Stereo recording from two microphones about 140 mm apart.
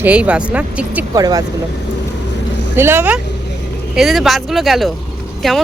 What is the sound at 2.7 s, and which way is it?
Speech, 15° right (ahead or behind).